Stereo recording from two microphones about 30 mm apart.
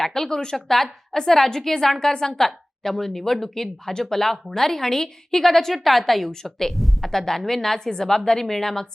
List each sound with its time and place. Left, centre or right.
0.0 s a woman's voice: centre
0.5 s a woman's voice: centre
6.7 s a sound: centre
7.1 s a woman's voice: centre